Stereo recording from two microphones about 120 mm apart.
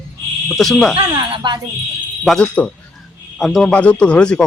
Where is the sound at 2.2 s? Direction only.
Centre (ahead or behind).